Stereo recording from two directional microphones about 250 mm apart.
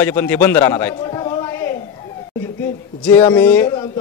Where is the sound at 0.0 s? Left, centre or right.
Centre.